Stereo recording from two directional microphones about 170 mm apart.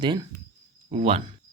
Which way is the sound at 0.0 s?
25° right (ahead or behind).